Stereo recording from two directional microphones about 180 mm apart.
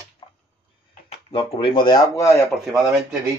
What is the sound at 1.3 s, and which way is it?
Speech, 25° left (ahead or behind).